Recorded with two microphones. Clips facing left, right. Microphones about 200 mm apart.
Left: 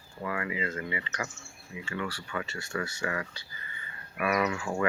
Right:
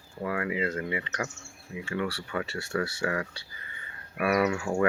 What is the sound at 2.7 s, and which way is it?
Speech, 35° right (ahead or behind).